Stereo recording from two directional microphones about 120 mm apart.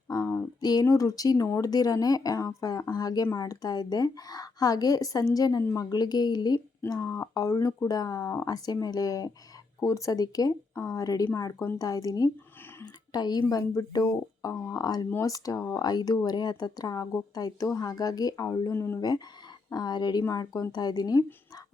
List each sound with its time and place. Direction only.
0.1 s a woman's voice: 30° left (ahead or behind)
18.7 s speech: 20° left (ahead or behind)
18.9 s a woman's voice: 35° left (ahead or behind)